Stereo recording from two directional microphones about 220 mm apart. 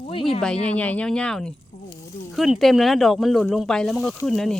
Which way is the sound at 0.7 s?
5° left (ahead or behind).